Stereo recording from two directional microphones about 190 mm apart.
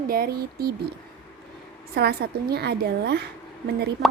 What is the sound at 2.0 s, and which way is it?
A woman's voice, 55° right (ahead or behind).